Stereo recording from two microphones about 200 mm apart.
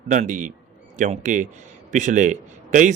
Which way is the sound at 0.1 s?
40° right (ahead or behind).